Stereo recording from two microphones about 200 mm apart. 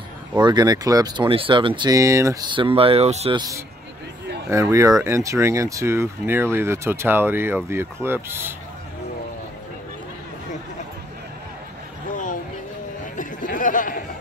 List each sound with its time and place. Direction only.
0.4 s speech: 20° right (ahead or behind)
3.3 s speech: 15° right (ahead or behind)
13.0 s a sound: 40° left (ahead or behind)